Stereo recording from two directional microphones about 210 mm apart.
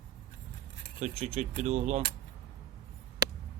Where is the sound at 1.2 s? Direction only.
30° right (ahead or behind).